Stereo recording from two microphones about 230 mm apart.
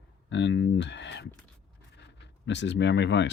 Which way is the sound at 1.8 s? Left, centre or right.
Left.